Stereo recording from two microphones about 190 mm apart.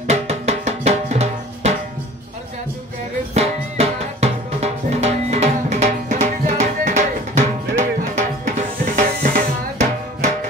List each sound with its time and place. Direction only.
0.0 s music: 35° right (ahead or behind)
3.3 s music: 35° right (ahead or behind)